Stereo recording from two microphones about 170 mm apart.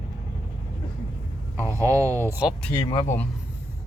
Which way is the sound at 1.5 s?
15° right (ahead or behind).